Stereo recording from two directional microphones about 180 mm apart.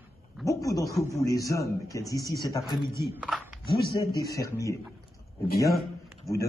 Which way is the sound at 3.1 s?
5° right (ahead or behind).